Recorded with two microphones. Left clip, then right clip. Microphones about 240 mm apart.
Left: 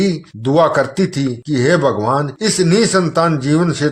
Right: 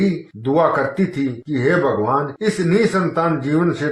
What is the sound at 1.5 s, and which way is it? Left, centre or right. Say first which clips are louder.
A man's voice: left 3 dB; left.